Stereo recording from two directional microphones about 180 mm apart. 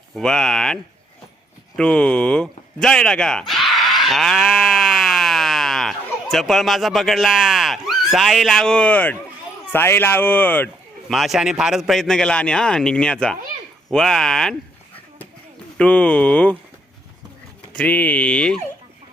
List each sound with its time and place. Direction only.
0.1 s a man's voice: 5° left (ahead or behind)
1.7 s a sound: 5° left (ahead or behind)
9.7 s speech: 10° left (ahead or behind)
11.1 s a man's voice: centre (ahead or behind)
15.8 s speech: 5° left (ahead or behind)
17.7 s speech: 5° left (ahead or behind)